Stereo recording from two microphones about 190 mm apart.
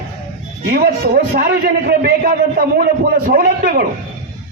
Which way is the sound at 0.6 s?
55° right (ahead or behind).